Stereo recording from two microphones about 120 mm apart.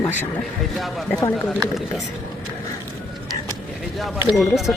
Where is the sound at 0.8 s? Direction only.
Centre (ahead or behind).